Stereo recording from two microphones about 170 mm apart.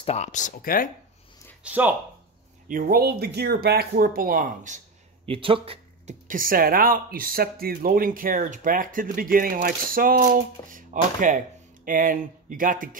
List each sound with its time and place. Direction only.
0.0 s speech: 40° left (ahead or behind); by 0.8 s 55° left (ahead or behind)
1.6 s speech: 10° right (ahead or behind)
2.7 s speech: 60° right (ahead or behind)
5.2 s speech: 30° right (ahead or behind)
6.2 s speech: 55° right (ahead or behind)